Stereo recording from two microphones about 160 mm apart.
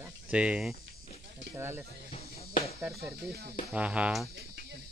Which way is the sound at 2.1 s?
40° left (ahead or behind).